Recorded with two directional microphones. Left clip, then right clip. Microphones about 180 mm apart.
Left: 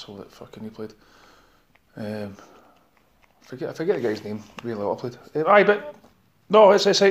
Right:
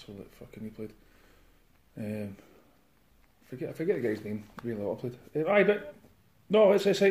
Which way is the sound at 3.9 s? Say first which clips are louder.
Left 6 dB; 60° left (ahead or behind).